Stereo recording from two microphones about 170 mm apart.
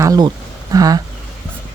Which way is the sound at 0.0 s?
20° right (ahead or behind).